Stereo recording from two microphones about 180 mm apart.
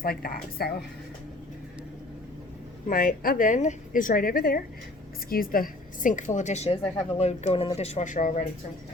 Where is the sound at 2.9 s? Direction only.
50° left (ahead or behind).